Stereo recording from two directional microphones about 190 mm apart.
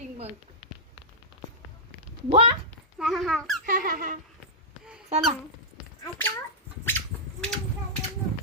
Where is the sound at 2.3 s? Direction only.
30° right (ahead or behind).